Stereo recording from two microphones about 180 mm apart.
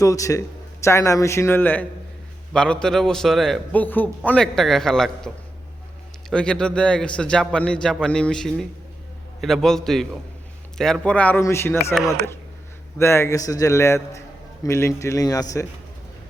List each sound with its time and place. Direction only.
0.0 s a man's voice: 15° left (ahead or behind)
6.3 s a man's voice: 5° left (ahead or behind)
13.0 s a man's voice: 15° left (ahead or behind)